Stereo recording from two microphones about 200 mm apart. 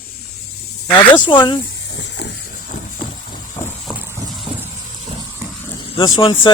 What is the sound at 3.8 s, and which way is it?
Vehicle, 10° right (ahead or behind).